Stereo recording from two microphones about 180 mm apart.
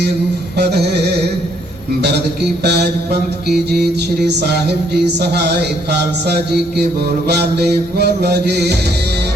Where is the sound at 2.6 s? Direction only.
65° right (ahead or behind).